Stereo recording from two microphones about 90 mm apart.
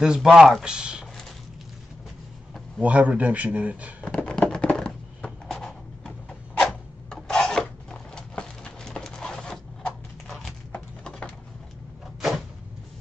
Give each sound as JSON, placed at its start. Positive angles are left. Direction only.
{"t": 0.0, "sound": "speech", "side_deg": -10}
{"t": 2.8, "sound": "speech", "side_deg": -15}
{"t": 4.0, "sound": "a sound", "side_deg": 10}